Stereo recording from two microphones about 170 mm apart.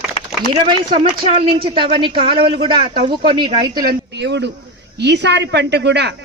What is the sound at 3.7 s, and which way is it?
A woman's voice, 60° right (ahead or behind).